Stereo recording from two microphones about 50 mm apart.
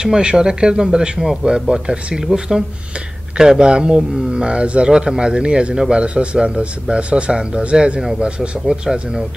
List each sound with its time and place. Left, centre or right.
0.0 s a man's voice: centre